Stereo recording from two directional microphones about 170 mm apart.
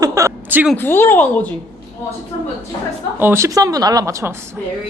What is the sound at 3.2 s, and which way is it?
Speech, 15° right (ahead or behind).